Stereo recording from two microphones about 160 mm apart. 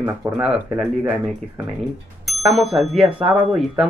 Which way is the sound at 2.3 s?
Centre (ahead or behind).